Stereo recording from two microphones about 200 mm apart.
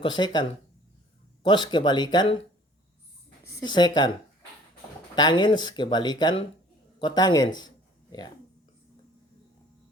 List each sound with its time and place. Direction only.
0.0 s speech: 25° left (ahead or behind)
3.5 s speech: 20° left (ahead or behind)
5.1 s speech: 20° left (ahead or behind)